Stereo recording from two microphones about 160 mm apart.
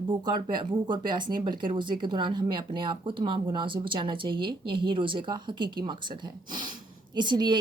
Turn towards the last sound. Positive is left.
turn(degrees=-30)  # may be behind; listen again after turning